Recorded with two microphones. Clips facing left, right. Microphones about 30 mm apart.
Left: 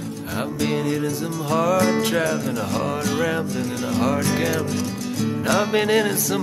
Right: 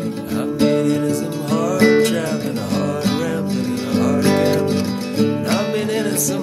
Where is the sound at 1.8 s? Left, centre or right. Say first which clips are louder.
Right 5 dB; right.